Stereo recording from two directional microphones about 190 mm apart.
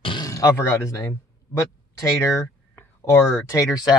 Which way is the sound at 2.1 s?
15° left (ahead or behind).